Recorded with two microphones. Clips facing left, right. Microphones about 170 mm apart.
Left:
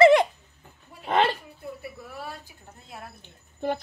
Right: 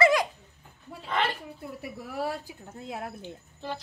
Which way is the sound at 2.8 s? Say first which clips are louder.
Right 7 dB; 90° right.